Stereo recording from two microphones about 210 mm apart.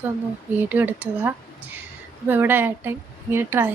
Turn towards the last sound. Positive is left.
turn(degrees=-10)  # may be behind; listen again after turning